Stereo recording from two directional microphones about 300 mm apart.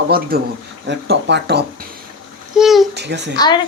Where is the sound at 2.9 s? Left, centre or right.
Right.